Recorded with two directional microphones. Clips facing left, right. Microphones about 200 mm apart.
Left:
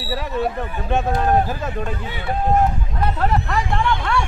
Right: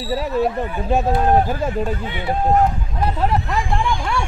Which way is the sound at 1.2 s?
25° right (ahead or behind).